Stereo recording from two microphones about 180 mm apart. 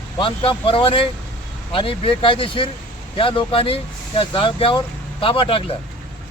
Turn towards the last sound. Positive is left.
turn(degrees=30)  # may be behind; listen again after turning